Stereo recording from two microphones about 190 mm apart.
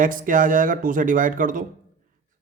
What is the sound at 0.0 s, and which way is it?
Speech, 45° right (ahead or behind).